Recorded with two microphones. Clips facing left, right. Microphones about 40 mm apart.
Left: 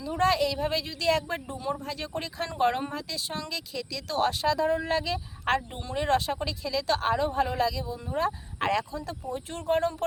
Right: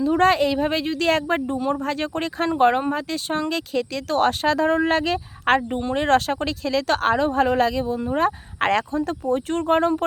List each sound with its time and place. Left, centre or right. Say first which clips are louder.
0.0 s speech: right 7 dB; right
2.5 s speech: right 8 dB; right
2.9 s speech: right 9 dB; right
5.9 s speech: right 6 dB; right
8.9 s speech: right 11 dB; right
9.2 s speech: right 8 dB; right